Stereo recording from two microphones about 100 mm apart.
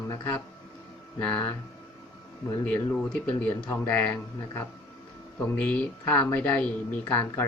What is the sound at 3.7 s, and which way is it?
Speech, 15° left (ahead or behind).